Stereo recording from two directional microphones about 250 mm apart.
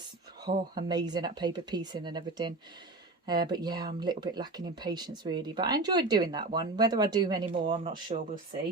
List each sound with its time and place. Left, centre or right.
0.4 s speech: centre